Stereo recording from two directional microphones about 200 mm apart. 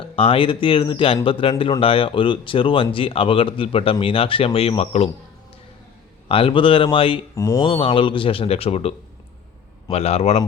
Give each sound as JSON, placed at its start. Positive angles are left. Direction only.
{"t": 0.0, "sound": "speech", "side_deg": 25}
{"t": 6.2, "sound": "speech", "side_deg": 25}
{"t": 7.3, "sound": "a man's voice", "side_deg": 15}